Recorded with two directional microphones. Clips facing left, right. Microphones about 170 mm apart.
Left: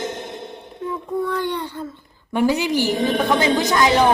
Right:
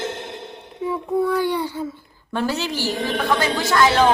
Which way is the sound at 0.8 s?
10° right (ahead or behind).